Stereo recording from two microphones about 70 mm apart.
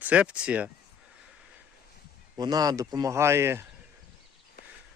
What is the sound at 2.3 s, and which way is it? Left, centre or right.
Speech, right.